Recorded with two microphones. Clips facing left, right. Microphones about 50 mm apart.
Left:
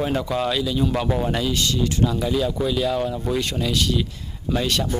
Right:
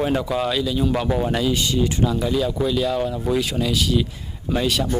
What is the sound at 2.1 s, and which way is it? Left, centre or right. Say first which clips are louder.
Speech: right 1 dB; centre.